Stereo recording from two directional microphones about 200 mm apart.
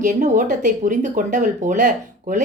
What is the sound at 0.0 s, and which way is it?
Speech, 40° right (ahead or behind).